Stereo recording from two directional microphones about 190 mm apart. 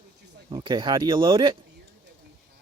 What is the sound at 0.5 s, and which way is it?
Child singing, 25° right (ahead or behind).